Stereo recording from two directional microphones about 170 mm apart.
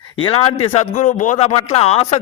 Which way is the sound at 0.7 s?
45° left (ahead or behind).